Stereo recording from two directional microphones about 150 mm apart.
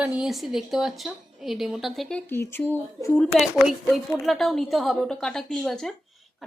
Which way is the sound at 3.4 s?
Centre (ahead or behind).